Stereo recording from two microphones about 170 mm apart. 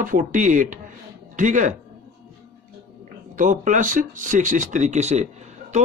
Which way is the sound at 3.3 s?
50° right (ahead or behind).